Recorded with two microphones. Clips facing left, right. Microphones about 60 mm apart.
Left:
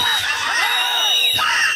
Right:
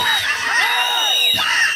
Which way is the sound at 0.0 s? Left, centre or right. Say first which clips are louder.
Right 2 dB; right.